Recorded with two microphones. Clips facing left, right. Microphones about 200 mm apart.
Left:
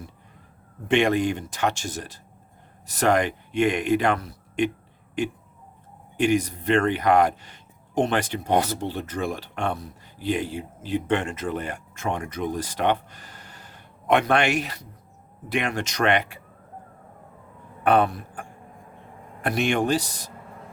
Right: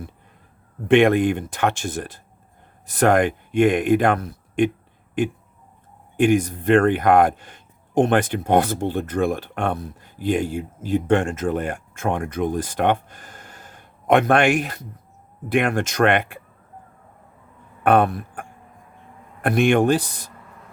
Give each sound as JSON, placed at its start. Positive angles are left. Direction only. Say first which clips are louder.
{"t": 0.9, "sound": "speech", "louder": "right 6 dB", "side_deg": -55}
{"t": 6.1, "sound": "speech", "louder": "right 4 dB", "side_deg": -50}
{"t": 17.8, "sound": "speech", "louder": "right 3 dB", "side_deg": -55}